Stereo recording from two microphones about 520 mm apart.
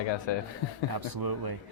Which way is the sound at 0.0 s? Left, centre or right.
Left.